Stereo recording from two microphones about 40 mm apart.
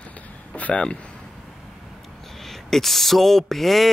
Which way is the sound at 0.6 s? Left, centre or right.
Left.